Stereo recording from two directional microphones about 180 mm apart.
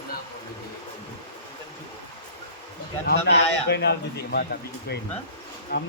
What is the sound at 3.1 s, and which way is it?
Speech, 65° left (ahead or behind).